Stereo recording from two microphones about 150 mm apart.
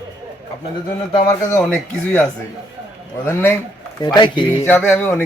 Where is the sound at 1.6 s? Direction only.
10° left (ahead or behind).